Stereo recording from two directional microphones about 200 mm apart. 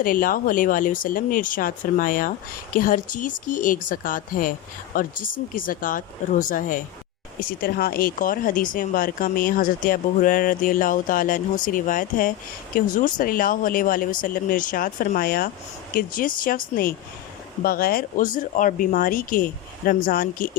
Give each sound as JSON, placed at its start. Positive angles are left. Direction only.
{"t": 0.0, "sound": "speech", "side_deg": 45}